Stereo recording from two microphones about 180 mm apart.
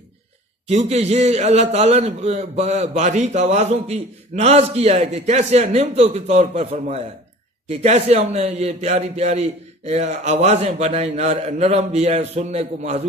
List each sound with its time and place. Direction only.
0.7 s a man's voice: 35° right (ahead or behind)